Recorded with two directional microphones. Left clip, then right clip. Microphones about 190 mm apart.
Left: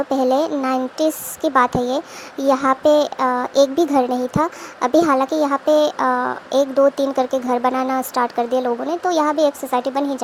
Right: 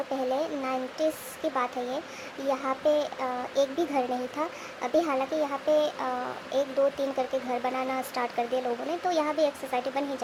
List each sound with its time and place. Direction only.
0.1 s speech: 30° left (ahead or behind)